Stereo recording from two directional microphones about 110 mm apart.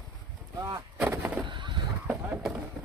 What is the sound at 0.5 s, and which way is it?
Artillery fire, 35° right (ahead or behind).